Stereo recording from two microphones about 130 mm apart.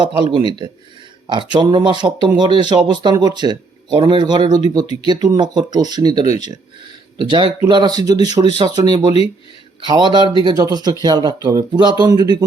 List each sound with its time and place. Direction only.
0.3 s speech: 30° right (ahead or behind)